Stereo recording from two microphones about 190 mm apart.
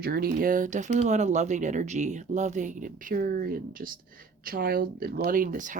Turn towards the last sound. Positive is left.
turn(degrees=-45)  # may be behind; listen again after turning